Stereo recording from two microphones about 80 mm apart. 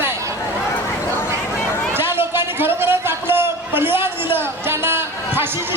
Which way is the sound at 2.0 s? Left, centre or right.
Right.